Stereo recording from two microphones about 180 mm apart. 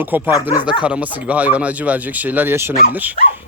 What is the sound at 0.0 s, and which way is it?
Speech, 10° right (ahead or behind).